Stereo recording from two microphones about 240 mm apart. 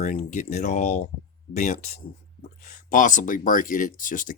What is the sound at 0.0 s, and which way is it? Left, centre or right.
Speech, left.